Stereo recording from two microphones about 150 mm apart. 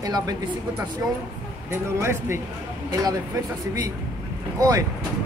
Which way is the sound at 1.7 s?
15° right (ahead or behind).